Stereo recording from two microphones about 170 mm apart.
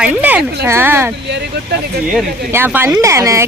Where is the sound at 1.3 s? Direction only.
90° right.